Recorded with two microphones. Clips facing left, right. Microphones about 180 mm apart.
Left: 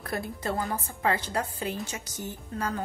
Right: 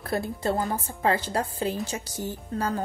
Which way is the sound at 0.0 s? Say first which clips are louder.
Right 5 dB; 30° right (ahead or behind).